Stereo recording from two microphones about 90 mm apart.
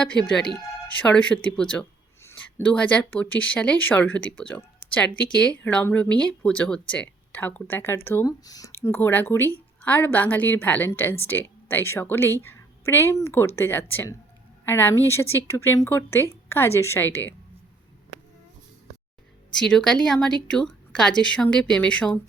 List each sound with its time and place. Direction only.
0.0 s speech: 10° left (ahead or behind)
2.2 s a sound: 20° left (ahead or behind)
2.7 s speech: 10° left (ahead or behind)
8.3 s speech: 45° left (ahead or behind)
8.7 s a woman's voice: 30° left (ahead or behind)
19.5 s speech: 5° left (ahead or behind)